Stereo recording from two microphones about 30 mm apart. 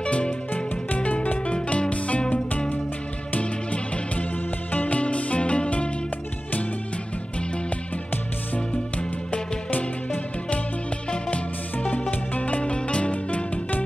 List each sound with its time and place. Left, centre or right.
0.0 s music: left
0.8 s music: left
1.4 s music: left
8.5 s music: left
9.7 s music: left
12.1 s music: left
12.7 s music: left